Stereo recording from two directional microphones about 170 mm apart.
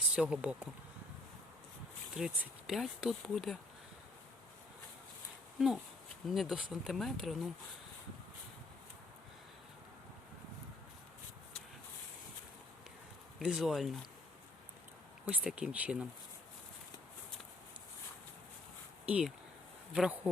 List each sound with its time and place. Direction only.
0.1 s speech: 5° right (ahead or behind)
2.1 s speech: centre (ahead or behind)
5.5 s speech: centre (ahead or behind)
13.4 s speech: 5° right (ahead or behind)
15.3 s speech: 5° right (ahead or behind)
19.0 s speech: 10° right (ahead or behind)